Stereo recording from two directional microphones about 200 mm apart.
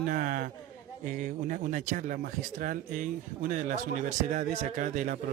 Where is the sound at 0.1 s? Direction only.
45° right (ahead or behind).